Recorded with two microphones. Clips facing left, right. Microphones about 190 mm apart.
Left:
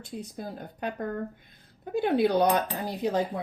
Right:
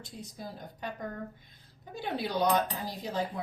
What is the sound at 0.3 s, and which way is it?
Speech, 55° left (ahead or behind).